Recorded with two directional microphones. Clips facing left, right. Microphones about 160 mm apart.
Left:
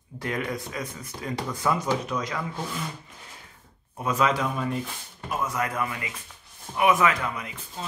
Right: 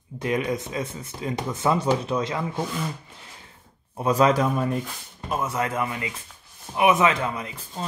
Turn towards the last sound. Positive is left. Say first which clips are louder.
# right 4 dB
turn(degrees=-30)  # may be behind; listen again after turning